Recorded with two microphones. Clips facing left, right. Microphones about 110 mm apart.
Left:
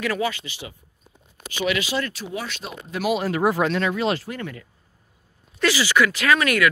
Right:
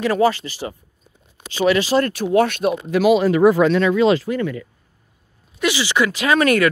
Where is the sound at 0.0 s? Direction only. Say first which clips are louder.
Right 8 dB; 30° right (ahead or behind).